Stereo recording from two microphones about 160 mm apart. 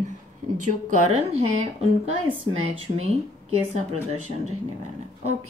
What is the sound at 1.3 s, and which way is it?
Speech, 40° right (ahead or behind).